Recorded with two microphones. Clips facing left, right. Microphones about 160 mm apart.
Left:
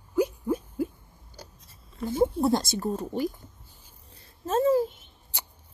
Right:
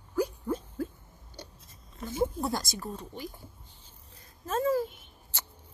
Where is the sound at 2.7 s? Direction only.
35° left (ahead or behind).